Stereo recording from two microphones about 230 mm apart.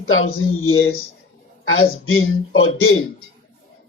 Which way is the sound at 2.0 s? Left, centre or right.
Left.